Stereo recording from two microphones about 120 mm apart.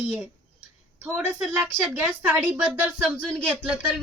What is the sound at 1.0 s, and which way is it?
Speech, 10° right (ahead or behind).